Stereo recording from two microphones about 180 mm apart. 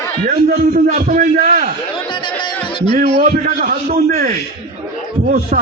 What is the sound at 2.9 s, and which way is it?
A man's voice, 45° right (ahead or behind).